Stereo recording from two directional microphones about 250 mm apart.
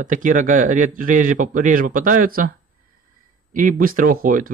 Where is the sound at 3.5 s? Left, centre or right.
Right.